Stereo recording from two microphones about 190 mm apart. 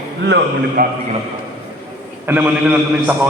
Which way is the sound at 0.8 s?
50° right (ahead or behind).